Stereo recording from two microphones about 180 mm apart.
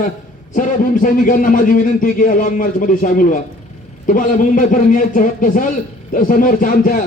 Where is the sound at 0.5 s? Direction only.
45° left (ahead or behind).